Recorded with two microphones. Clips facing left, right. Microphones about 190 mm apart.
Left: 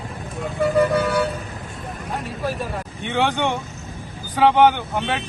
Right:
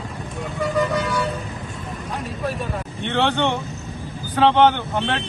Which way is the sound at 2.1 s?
Centre (ahead or behind).